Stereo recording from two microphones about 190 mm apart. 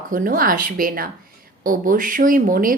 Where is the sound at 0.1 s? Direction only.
45° right (ahead or behind).